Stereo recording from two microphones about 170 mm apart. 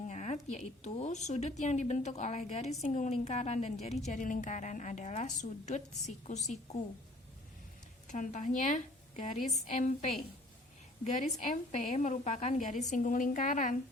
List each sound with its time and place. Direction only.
0.0 s a sound: 45° left (ahead or behind)
0.5 s a woman's voice: 40° left (ahead or behind)
8.0 s a woman's voice: 45° left (ahead or behind)